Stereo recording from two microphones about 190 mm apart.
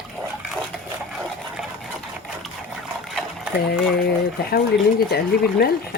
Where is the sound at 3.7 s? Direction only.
55° left (ahead or behind).